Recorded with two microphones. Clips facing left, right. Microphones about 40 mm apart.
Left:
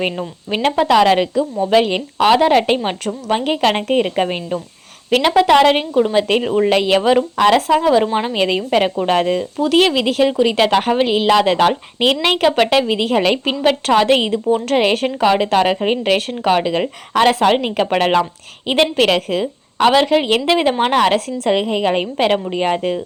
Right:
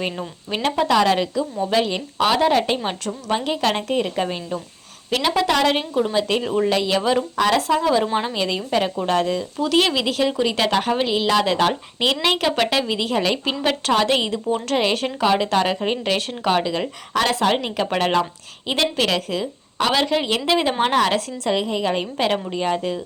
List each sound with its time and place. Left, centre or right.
0.2 s speech: left
0.8 s a woman's voice: left
5.8 s speech: left
6.2 s a woman's voice: left
8.0 s speech: centre
8.3 s a woman's voice: left
9.6 s speech: centre
14.8 s a woman's voice: left
19.9 s a woman's voice: centre; by 23.0 s left